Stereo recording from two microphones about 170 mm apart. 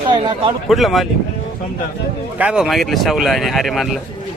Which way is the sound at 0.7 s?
Centre (ahead or behind).